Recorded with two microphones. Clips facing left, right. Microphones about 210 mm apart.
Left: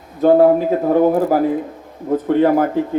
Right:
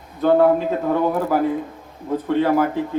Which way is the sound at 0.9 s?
40° left (ahead or behind).